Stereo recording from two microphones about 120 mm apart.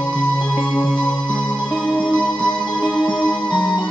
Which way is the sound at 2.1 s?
15° right (ahead or behind).